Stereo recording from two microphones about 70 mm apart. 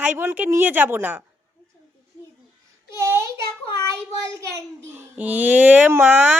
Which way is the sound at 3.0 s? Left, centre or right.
Right.